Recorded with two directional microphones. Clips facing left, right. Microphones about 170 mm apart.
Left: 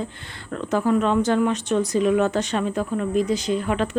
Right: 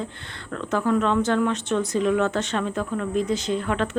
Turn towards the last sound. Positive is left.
turn(degrees=10)  # may be behind; listen again after turning